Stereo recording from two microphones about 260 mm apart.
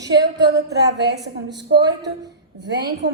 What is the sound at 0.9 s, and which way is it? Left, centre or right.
Speech, right.